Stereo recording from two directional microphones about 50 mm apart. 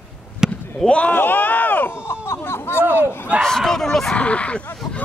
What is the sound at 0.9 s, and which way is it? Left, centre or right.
Speech, left.